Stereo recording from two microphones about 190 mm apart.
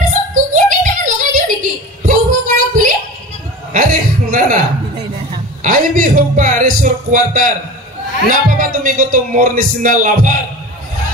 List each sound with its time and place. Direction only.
0.5 s a sound: 40° right (ahead or behind)
3.7 s chuckle: 45° right (ahead or behind)
5.6 s speech: 45° right (ahead or behind)